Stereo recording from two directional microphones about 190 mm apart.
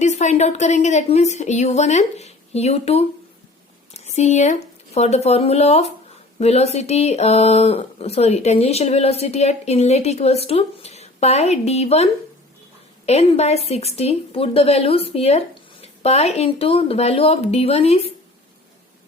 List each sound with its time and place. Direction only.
0.0 s speech: 35° left (ahead or behind)
3.9 s a sound: 35° left (ahead or behind)
4.9 s speech: 35° left (ahead or behind)
13.1 s speech: 35° left (ahead or behind)